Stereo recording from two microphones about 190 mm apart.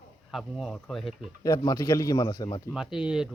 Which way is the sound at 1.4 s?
20° left (ahead or behind).